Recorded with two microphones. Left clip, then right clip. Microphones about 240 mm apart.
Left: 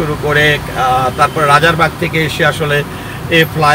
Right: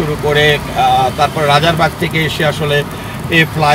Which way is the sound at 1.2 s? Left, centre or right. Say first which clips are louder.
Left 2 dB; left.